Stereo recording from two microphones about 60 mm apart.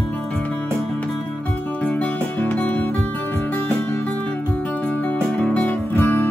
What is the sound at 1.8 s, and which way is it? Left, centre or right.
Music, left.